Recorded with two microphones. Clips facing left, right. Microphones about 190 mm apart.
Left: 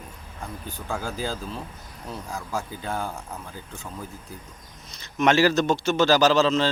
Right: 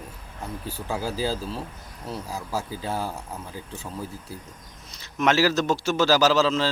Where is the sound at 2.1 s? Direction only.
5° right (ahead or behind).